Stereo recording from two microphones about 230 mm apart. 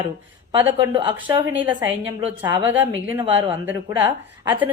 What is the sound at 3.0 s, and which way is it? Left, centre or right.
Speech, centre.